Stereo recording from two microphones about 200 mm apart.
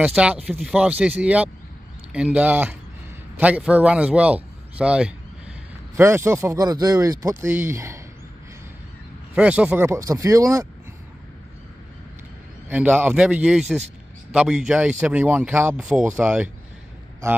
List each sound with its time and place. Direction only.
0.0 s a man's voice: 5° right (ahead or behind)
9.3 s speech: 5° right (ahead or behind)
12.6 s speech: 10° right (ahead or behind)